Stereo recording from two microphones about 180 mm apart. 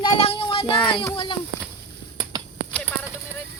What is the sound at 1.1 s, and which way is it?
Speech, 30° left (ahead or behind).